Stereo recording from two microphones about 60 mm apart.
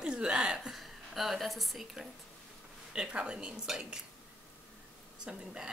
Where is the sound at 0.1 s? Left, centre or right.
Centre.